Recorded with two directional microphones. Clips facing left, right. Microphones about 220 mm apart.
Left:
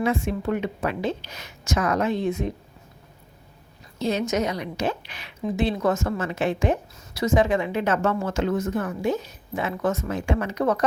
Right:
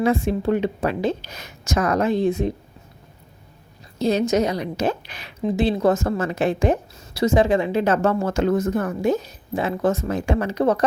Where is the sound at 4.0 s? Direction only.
35° right (ahead or behind).